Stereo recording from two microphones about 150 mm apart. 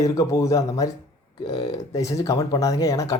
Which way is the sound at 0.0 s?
20° left (ahead or behind).